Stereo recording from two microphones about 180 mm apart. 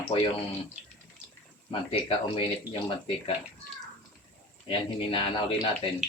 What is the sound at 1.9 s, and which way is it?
Speech, 30° left (ahead or behind).